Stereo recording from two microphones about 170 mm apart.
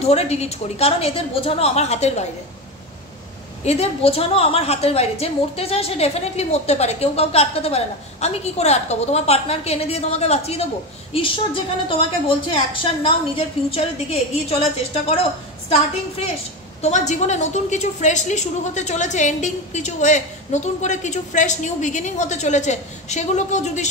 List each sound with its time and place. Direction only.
0.0 s a woman's voice: 40° left (ahead or behind)
3.6 s a woman's voice: 40° left (ahead or behind)
16.8 s a woman's voice: 40° left (ahead or behind)